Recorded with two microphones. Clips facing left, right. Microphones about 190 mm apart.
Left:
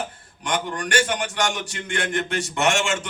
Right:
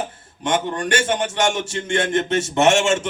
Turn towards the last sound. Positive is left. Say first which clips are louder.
# right 6 dB
turn(degrees=-25)  # may be behind; listen again after turning